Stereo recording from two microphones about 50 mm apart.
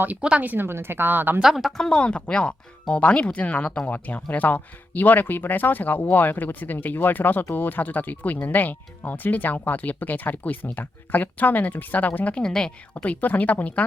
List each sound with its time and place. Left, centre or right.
0.2 s speech: right
0.4 s a woman's voice: right
0.7 s speech: right
1.4 s speech: centre
1.8 s speech: centre
12.4 s speech: centre
13.0 s speech: left